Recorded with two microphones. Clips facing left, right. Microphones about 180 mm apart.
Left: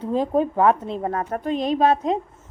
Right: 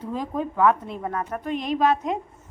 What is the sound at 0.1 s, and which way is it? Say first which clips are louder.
A woman's voice: left 8 dB; 30° left (ahead or behind).